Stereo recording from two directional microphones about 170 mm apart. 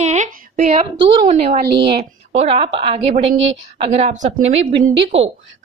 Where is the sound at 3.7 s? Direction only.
40° right (ahead or behind).